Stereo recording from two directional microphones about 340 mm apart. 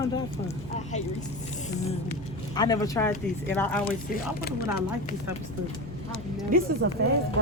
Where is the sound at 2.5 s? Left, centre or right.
Centre.